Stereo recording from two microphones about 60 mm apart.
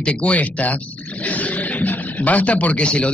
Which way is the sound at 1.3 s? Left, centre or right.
Left.